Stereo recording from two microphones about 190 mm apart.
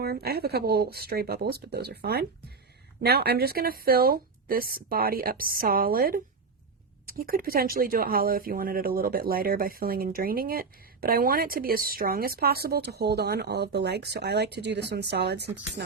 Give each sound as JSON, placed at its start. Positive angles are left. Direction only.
{"t": 0.0, "sound": "speech", "side_deg": -55}